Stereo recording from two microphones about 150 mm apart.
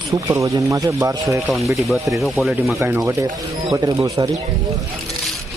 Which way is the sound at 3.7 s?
25° right (ahead or behind).